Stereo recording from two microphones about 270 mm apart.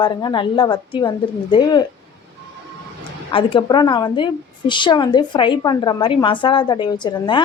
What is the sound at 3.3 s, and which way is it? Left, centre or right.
A woman's voice, centre.